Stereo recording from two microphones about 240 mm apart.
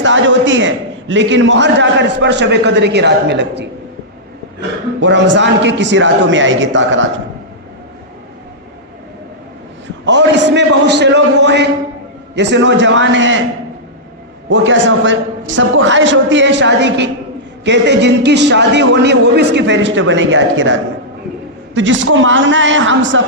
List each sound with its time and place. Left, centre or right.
0.0 s a man's voice: right
4.9 s a man's voice: right
10.1 s a man's voice: right
14.5 s a man's voice: right
21.8 s a man's voice: right